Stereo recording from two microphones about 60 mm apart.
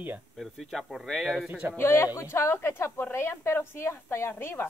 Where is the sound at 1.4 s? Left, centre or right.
Right.